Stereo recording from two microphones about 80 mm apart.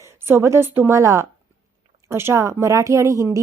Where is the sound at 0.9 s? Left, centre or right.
Right.